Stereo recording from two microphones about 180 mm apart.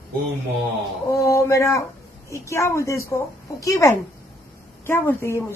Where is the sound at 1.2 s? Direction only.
15° left (ahead or behind).